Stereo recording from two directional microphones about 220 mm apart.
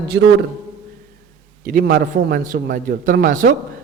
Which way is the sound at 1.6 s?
40° right (ahead or behind).